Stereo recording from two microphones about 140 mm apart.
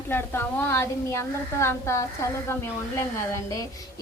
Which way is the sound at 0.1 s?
15° left (ahead or behind).